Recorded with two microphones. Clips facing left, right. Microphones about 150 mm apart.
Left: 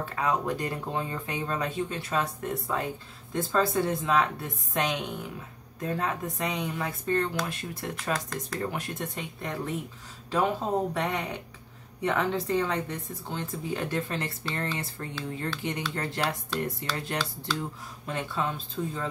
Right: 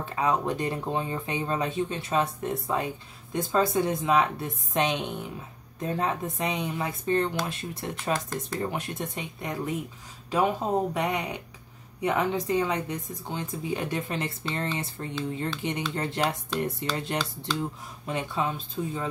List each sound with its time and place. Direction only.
0.0 s a woman's voice: 20° right (ahead or behind)